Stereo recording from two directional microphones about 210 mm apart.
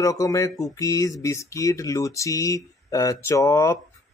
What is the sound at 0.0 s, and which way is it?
Speech, 15° left (ahead or behind).